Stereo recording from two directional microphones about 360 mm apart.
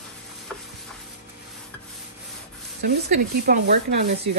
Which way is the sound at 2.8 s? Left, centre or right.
Right.